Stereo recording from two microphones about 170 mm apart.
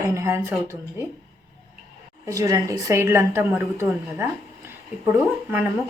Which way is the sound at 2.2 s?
20° right (ahead or behind).